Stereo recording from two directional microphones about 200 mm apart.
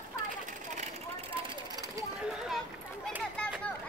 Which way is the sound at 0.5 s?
40° right (ahead or behind).